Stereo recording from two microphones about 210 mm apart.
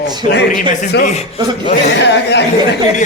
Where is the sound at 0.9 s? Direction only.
55° left (ahead or behind).